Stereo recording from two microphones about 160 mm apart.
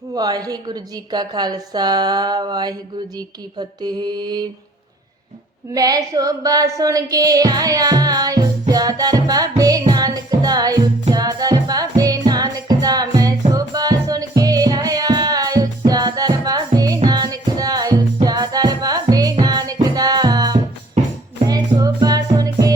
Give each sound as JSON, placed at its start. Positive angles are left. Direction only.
{"t": 0.1, "sound": "music", "side_deg": -25}
{"t": 5.7, "sound": "music", "side_deg": -20}